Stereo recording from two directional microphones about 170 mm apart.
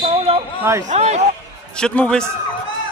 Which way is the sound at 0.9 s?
40° right (ahead or behind).